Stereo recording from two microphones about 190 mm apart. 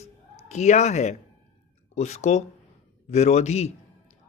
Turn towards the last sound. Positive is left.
turn(degrees=35)  # may be behind; listen again after turning